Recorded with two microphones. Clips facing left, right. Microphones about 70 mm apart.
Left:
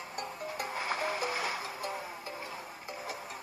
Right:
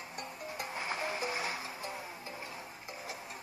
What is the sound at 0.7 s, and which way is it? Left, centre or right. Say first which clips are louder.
Music: left 3 dB; left.